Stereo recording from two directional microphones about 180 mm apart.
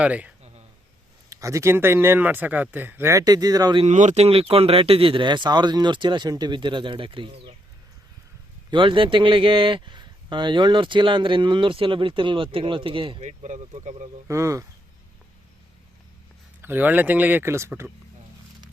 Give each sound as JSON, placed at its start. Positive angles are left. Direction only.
{"t": 0.0, "sound": "speech", "side_deg": -5}
{"t": 3.8, "sound": "speech", "side_deg": -40}
{"t": 8.7, "sound": "speech", "side_deg": -25}
{"t": 13.2, "sound": "speech", "side_deg": -40}
{"t": 14.3, "sound": "speech", "side_deg": -15}
{"t": 16.6, "sound": "speech", "side_deg": -10}